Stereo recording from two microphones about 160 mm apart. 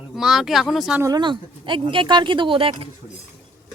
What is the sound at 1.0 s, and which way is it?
Speech, 25° right (ahead or behind).